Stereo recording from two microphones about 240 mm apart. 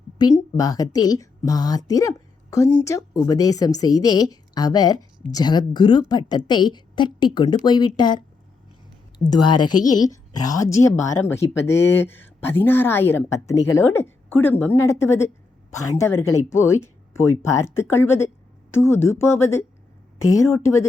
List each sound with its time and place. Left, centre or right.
0.2 s speech: centre
9.6 s a woman's voice: left
9.9 s a woman's voice: centre